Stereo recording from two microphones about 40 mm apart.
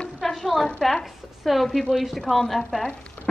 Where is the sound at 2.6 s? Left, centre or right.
Centre.